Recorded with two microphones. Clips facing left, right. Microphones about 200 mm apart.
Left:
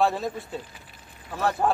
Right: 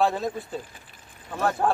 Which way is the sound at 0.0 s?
Centre (ahead or behind).